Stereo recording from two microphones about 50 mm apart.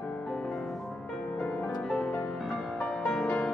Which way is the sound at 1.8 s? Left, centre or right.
Centre.